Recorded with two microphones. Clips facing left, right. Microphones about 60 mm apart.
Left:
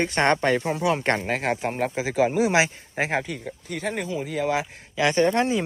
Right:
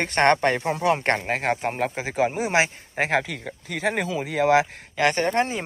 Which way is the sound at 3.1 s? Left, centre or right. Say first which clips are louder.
Right 2 dB; right.